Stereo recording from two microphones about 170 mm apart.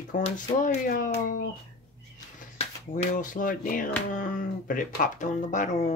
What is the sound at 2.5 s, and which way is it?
Speech, 45° left (ahead or behind).